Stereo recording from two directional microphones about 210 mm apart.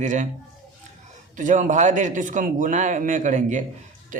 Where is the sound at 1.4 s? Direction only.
35° right (ahead or behind).